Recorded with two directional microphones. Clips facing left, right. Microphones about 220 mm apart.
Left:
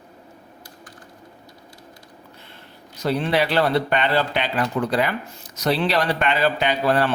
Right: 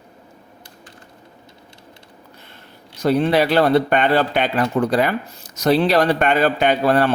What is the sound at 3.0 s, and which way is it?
Speech, 45° right (ahead or behind).